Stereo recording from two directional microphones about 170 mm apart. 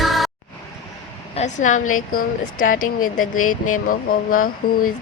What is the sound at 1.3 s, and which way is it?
A woman's voice, 45° left (ahead or behind).